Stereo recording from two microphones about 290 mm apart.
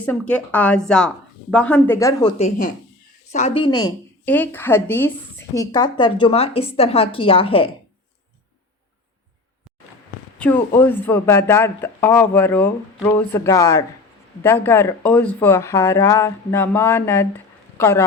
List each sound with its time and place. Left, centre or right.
0.0 s a woman's voice: centre
10.3 s a woman's voice: centre